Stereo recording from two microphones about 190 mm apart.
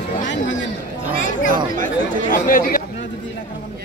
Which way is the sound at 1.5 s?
45° right (ahead or behind).